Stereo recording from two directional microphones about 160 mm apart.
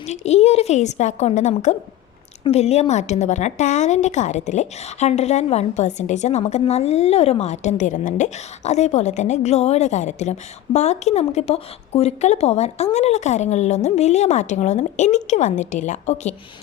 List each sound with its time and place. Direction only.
0.0 s a woman's voice: 45° left (ahead or behind)